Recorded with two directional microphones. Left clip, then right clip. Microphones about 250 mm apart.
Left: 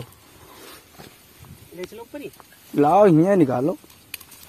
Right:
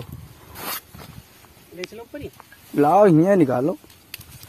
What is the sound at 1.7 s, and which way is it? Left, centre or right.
Speech, centre.